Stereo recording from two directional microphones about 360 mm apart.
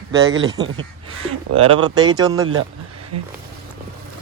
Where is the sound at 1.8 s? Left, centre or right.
Centre.